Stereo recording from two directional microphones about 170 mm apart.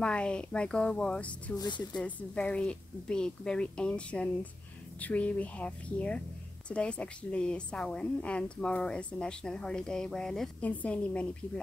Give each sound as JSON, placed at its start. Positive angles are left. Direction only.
{"t": 0.0, "sound": "a woman's voice", "side_deg": 5}
{"t": 1.6, "sound": "speech", "side_deg": 25}
{"t": 2.0, "sound": "a woman's voice", "side_deg": 10}